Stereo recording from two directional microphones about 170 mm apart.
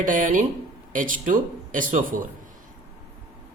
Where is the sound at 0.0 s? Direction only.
50° right (ahead or behind).